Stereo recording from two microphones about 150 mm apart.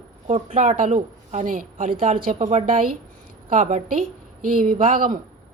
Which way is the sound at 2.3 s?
45° right (ahead or behind).